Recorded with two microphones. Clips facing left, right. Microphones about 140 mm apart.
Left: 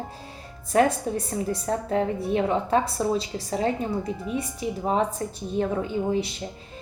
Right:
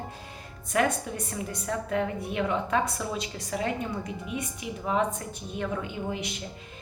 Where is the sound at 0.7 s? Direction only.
35° left (ahead or behind).